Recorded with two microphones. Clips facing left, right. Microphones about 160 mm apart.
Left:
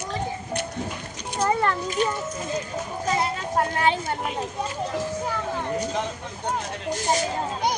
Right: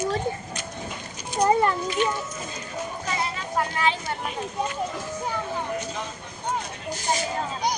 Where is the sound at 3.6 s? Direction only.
50° left (ahead or behind).